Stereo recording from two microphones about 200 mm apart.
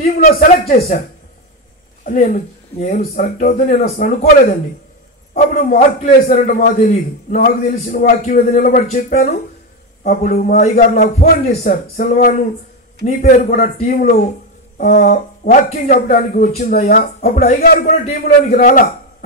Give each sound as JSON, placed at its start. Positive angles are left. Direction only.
{"t": 0.0, "sound": "speech", "side_deg": 45}
{"t": 0.7, "sound": "a man's voice", "side_deg": 30}
{"t": 2.0, "sound": "a man's voice", "side_deg": 35}
{"t": 5.3, "sound": "a man's voice", "side_deg": 45}